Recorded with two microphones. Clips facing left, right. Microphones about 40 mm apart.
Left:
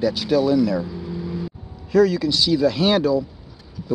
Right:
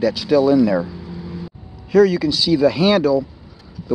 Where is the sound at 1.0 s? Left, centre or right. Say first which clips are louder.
Left 3 dB; centre.